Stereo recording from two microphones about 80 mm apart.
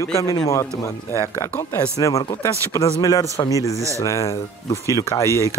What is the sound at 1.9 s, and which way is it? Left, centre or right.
Speech, left.